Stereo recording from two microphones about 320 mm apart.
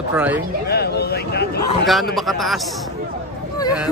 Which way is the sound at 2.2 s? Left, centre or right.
Centre.